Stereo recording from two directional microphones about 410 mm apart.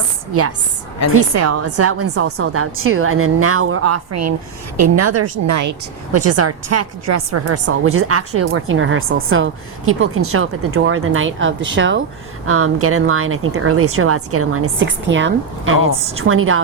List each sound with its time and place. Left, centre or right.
1.3 s a woman's voice: right
6.1 s a woman's voice: right